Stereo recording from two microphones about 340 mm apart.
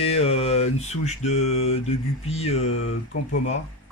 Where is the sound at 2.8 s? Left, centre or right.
Left.